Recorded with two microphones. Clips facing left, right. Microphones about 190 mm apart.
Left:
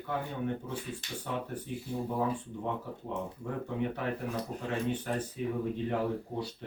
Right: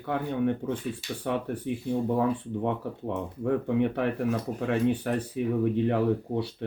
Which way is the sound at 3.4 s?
65° right (ahead or behind).